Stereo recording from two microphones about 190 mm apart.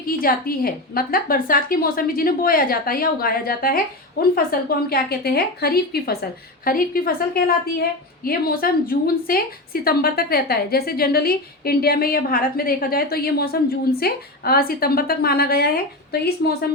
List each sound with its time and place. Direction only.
0.0 s a woman's voice: 50° left (ahead or behind)